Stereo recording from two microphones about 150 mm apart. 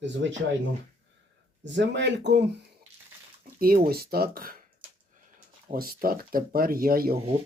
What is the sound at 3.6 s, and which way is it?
Speech, 80° right.